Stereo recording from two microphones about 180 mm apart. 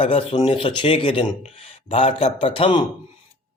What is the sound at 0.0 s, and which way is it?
Speech, 30° left (ahead or behind).